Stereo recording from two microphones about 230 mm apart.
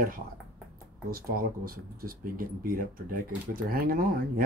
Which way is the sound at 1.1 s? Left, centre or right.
Right.